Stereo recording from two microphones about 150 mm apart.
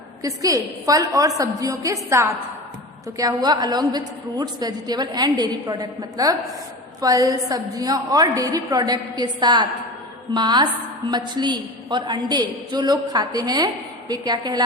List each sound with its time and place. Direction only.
0.2 s a woman's voice: 20° right (ahead or behind)